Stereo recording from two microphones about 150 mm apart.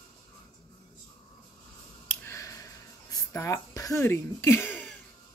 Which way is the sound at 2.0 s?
20° left (ahead or behind).